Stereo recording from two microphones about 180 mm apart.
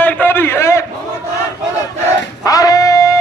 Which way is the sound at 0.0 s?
10° left (ahead or behind).